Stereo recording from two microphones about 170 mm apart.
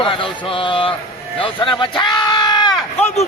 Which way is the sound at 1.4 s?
30° left (ahead or behind).